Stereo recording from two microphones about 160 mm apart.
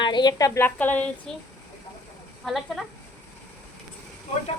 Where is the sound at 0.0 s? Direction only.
25° left (ahead or behind); by 2.8 s centre (ahead or behind).